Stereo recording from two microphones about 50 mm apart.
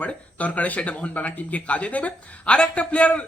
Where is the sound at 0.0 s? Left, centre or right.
Left.